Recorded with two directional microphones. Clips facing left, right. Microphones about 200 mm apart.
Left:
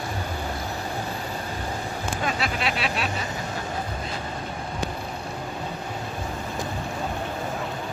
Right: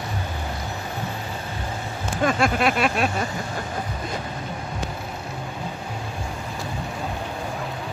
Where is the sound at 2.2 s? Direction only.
50° right (ahead or behind).